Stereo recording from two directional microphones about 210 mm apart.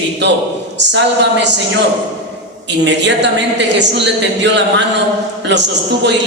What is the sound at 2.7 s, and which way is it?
A man's voice, 55° right (ahead or behind).